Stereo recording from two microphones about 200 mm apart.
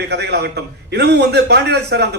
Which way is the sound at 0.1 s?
55° right (ahead or behind).